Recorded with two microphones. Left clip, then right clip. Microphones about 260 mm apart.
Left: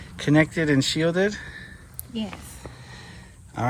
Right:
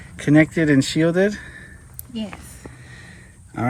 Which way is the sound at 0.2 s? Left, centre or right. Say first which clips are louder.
Right 4 dB; centre.